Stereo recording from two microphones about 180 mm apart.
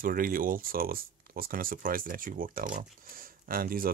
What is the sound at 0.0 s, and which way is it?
Speech, 50° right (ahead or behind).